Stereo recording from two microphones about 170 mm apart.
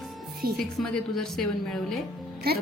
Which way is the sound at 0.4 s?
60° right (ahead or behind).